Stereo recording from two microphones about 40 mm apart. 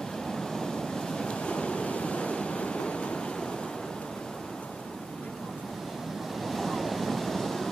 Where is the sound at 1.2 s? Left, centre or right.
Left.